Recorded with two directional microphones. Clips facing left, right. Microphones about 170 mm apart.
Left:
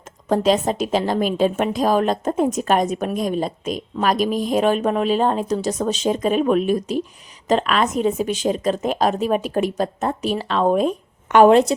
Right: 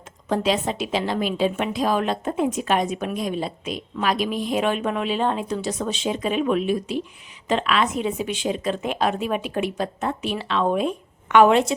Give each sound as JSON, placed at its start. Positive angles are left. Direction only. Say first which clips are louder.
{"t": 0.3, "sound": "a woman's voice", "louder": "left 5 dB", "side_deg": 45}